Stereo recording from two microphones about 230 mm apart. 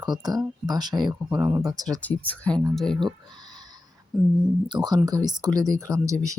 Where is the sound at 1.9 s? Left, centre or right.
Centre.